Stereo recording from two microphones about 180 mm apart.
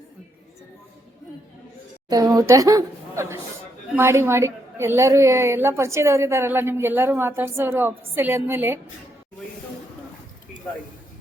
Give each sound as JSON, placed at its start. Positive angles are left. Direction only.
{"t": 2.0, "sound": "a woman's voice", "side_deg": -20}